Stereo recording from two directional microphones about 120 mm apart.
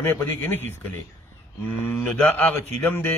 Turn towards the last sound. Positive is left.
turn(degrees=15)  # may be behind; listen again after turning